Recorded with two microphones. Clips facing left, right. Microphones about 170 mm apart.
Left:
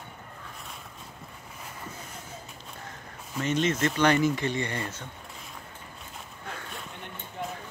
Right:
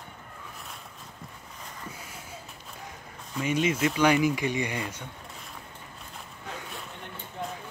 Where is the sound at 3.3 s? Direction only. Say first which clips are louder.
Even; 10° right (ahead or behind).